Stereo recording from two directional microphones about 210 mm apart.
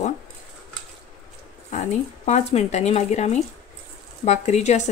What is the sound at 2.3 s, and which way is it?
Speech, 30° left (ahead or behind).